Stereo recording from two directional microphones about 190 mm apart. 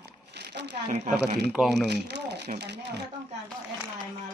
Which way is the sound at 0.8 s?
40° right (ahead or behind).